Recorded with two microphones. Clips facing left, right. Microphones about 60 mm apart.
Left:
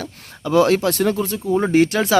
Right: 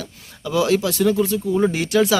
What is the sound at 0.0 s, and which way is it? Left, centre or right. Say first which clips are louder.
Speech: left 3 dB; left.